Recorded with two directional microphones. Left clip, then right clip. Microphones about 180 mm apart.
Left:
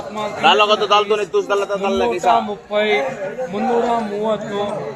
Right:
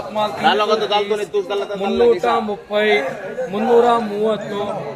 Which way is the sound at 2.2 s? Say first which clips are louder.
Left 3 dB; 35° right (ahead or behind).